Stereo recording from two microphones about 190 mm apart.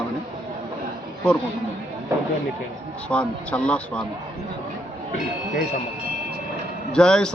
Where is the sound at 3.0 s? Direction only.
5° left (ahead or behind).